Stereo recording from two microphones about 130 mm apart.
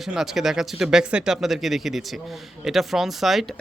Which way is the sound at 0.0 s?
Centre (ahead or behind).